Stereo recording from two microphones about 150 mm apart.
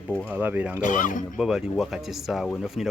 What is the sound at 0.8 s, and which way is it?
Speech, 60° left (ahead or behind).